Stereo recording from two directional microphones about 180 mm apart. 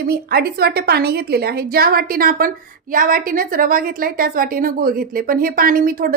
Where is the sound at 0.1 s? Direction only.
60° right (ahead or behind).